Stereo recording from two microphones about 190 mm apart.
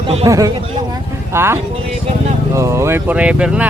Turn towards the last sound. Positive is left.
turn(degrees=-5)  # may be behind; listen again after turning